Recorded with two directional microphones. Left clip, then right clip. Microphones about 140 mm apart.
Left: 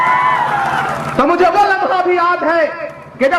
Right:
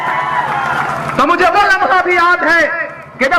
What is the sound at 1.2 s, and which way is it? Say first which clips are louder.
A man's voice: right 1 dB; 25° right (ahead or behind).